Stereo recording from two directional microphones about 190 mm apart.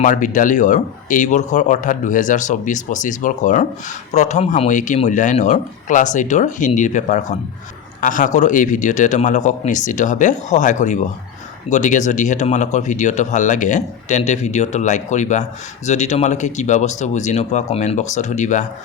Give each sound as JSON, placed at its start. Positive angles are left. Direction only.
{"t": 0.0, "sound": "speech", "side_deg": 40}